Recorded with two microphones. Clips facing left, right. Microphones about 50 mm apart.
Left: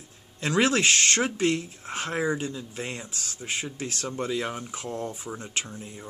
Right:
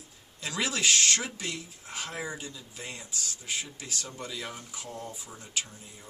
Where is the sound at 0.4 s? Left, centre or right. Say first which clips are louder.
Left 8 dB; left.